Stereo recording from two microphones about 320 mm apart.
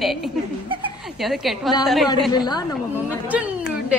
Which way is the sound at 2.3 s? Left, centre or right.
Centre.